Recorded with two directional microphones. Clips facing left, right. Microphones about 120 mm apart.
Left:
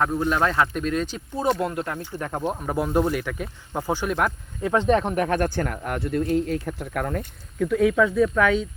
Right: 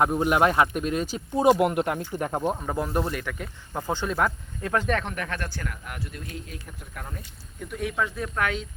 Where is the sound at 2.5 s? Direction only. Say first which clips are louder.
Left 3 dB; 5° left (ahead or behind).